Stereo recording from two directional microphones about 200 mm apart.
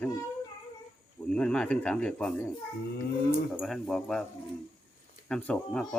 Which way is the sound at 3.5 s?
Centre (ahead or behind).